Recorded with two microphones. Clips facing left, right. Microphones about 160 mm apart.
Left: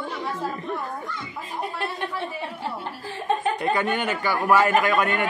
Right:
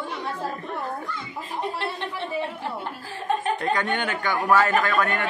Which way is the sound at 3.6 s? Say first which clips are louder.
Left 1 dB; 5° left (ahead or behind).